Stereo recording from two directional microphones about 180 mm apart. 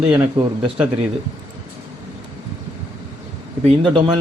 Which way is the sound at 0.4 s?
30° right (ahead or behind).